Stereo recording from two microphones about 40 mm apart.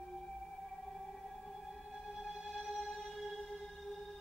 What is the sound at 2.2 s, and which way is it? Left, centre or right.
Music, centre.